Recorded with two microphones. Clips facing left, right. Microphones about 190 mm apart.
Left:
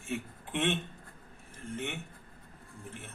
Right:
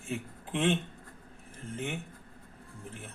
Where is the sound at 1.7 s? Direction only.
35° right (ahead or behind).